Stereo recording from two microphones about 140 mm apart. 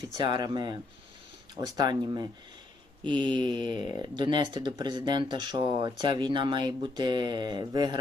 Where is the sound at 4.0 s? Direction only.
35° right (ahead or behind).